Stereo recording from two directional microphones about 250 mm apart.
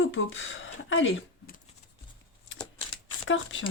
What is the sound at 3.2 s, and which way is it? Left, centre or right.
Speech, left.